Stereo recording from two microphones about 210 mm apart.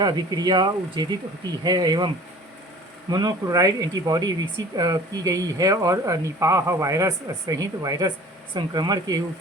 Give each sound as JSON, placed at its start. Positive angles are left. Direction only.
{"t": 0.0, "sound": "speech", "side_deg": -20}
{"t": 3.1, "sound": "speech", "side_deg": -20}